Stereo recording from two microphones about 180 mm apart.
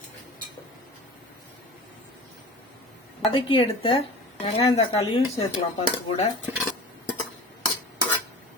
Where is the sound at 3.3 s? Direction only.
30° left (ahead or behind).